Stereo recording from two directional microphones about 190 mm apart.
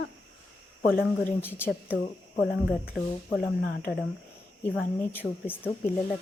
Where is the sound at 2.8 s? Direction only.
5° right (ahead or behind).